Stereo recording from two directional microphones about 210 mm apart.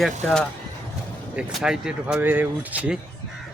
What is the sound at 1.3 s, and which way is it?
Speech, centre (ahead or behind).